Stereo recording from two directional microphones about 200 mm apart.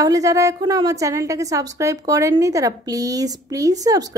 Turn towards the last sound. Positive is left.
turn(degrees=-20)  # may be behind; listen again after turning